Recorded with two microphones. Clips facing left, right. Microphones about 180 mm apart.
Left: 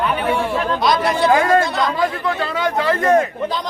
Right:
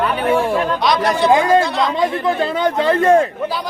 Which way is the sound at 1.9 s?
25° right (ahead or behind).